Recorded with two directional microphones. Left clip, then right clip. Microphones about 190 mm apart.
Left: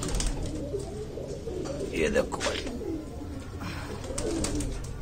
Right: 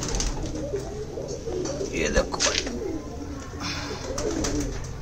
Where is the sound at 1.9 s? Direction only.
20° left (ahead or behind).